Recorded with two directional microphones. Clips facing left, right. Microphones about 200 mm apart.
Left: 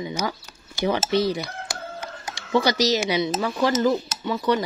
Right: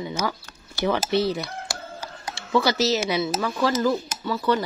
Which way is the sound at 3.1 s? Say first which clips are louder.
Left 1 dB; 15° left (ahead or behind).